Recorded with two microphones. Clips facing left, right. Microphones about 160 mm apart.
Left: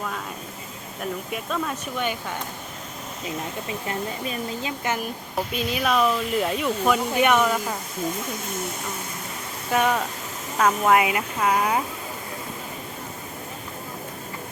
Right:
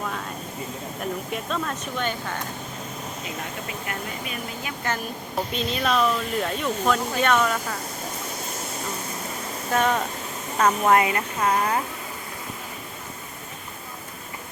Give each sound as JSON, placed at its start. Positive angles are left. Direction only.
{"t": 1.3, "sound": "speech", "side_deg": 5}
{"t": 3.8, "sound": "speech", "side_deg": 25}
{"t": 5.5, "sound": "speech", "side_deg": 5}
{"t": 9.7, "sound": "speech", "side_deg": 10}